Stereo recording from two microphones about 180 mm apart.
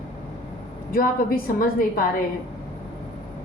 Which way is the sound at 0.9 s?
55° left (ahead or behind).